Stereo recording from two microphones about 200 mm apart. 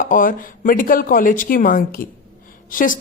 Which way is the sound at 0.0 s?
45° left (ahead or behind).